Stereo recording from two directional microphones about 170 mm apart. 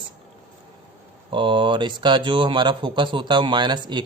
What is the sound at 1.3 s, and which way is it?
Speech, 30° right (ahead or behind).